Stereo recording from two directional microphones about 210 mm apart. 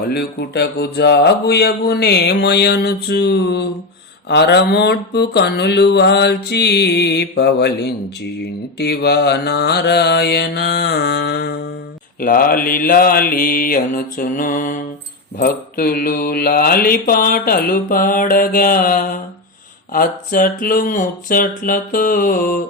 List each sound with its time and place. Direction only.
0.0 s mantra: 50° left (ahead or behind)
19.9 s speech: 40° left (ahead or behind)